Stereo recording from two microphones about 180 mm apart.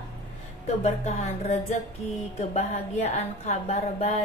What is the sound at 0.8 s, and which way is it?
Music, 40° left (ahead or behind).